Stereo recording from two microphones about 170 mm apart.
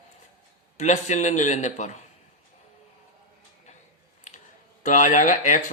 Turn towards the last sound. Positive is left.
turn(degrees=50)  # may be behind; listen again after turning